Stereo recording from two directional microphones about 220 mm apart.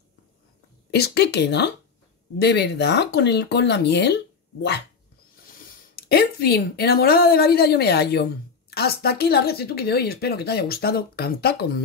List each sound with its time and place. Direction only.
0.9 s a woman's voice: 45° left (ahead or behind)
5.9 s a woman's voice: 45° left (ahead or behind)